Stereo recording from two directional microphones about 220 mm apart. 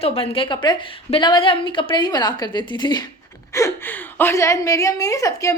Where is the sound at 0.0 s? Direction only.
25° left (ahead or behind).